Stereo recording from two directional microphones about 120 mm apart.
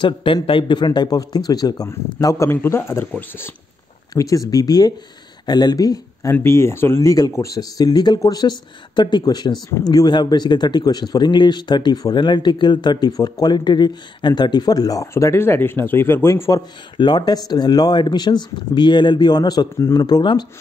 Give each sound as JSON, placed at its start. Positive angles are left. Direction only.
{"t": 0.0, "sound": "speech", "side_deg": 45}
{"t": 16.9, "sound": "speech", "side_deg": 40}